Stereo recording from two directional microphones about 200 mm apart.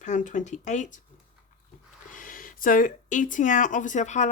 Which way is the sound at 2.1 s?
45° left (ahead or behind).